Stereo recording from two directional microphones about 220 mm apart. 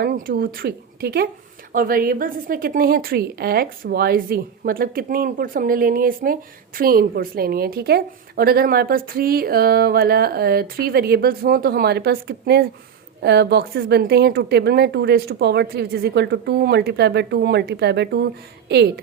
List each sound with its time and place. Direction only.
0.0 s a woman's voice: 40° right (ahead or behind)